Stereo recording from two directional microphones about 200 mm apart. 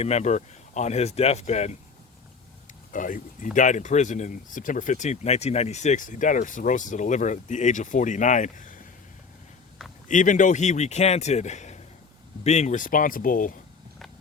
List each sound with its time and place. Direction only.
0.0 s speech: 35° left (ahead or behind)
2.9 s speech: 40° left (ahead or behind)
10.1 s speech: 40° left (ahead or behind)